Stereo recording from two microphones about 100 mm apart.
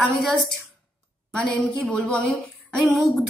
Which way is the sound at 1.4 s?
10° left (ahead or behind).